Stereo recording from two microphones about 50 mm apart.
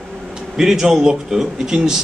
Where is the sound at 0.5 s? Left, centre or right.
Centre.